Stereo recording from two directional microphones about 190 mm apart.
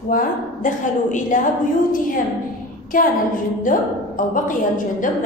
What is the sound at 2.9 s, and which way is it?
A woman's voice, 45° left (ahead or behind).